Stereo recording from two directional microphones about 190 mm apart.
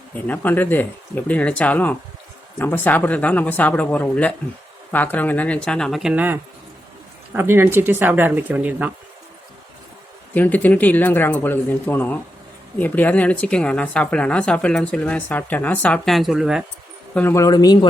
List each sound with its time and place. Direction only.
0.3 s speech: 10° left (ahead or behind); by 8.9 s 10° right (ahead or behind)
10.3 s speech: 10° left (ahead or behind)
17.2 s speech: 15° left (ahead or behind)